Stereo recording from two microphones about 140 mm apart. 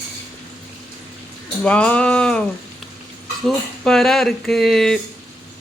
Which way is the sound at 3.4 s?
5° left (ahead or behind).